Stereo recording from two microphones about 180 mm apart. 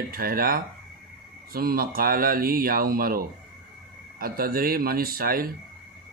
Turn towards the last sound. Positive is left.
turn(degrees=-55)  # may be behind; listen again after turning